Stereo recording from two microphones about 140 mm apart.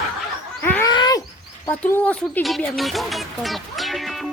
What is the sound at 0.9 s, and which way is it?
Groan, 30° left (ahead or behind).